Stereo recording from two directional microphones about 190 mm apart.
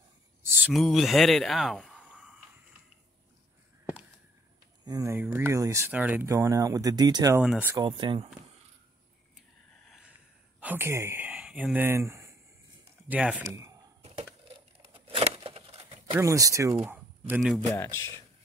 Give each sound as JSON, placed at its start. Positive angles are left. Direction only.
{"t": 0.4, "sound": "a sound", "side_deg": -10}
{"t": 0.7, "sound": "speech", "side_deg": 0}
{"t": 4.8, "sound": "speech", "side_deg": -15}
{"t": 7.4, "sound": "speech", "side_deg": -5}
{"t": 7.7, "sound": "speech", "side_deg": -20}
{"t": 9.8, "sound": "a sound", "side_deg": -5}
{"t": 10.6, "sound": "speech", "side_deg": -10}
{"t": 14.9, "sound": "a sound", "side_deg": -30}
{"t": 16.2, "sound": "speech", "side_deg": -15}
{"t": 17.6, "sound": "speech", "side_deg": 10}